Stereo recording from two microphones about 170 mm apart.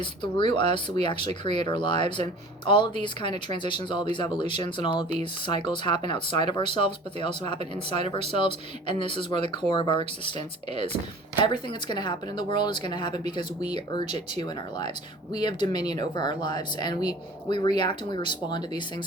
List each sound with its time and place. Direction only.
0.0 s speech: 30° left (ahead or behind)
15.3 s speech: 25° left (ahead or behind)